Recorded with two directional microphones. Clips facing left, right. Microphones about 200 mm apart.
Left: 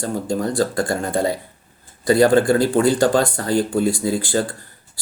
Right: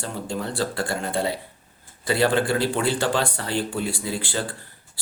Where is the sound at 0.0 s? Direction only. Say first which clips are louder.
Left 7 dB; 45° left (ahead or behind).